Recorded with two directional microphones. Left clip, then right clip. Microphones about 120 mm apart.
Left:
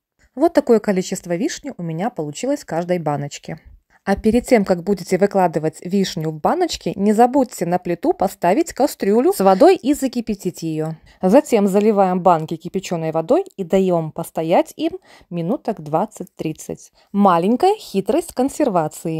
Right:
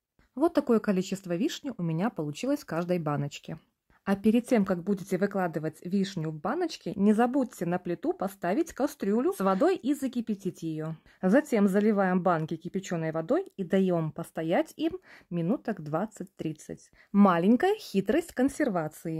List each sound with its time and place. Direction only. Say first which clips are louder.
0.4 s speech: left 11 dB; 35° left (ahead or behind); by 7.0 s 55° left (ahead or behind)
7.0 s speech: left 11 dB; 35° left (ahead or behind)
7.3 s speech: left 12 dB; 50° left (ahead or behind)
17.2 s speech: left 9 dB; 30° left (ahead or behind)